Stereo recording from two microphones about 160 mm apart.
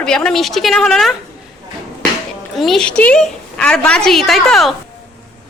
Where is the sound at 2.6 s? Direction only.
Centre (ahead or behind).